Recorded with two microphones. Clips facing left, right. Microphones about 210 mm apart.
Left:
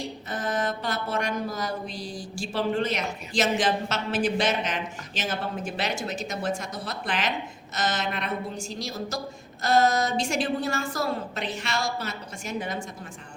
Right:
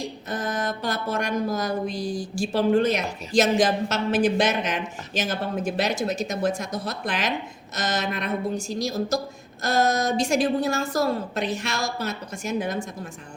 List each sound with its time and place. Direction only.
0.3 s mantra: 40° right (ahead or behind)
5.1 s speech: 40° right (ahead or behind)
9.6 s mantra: 45° right (ahead or behind)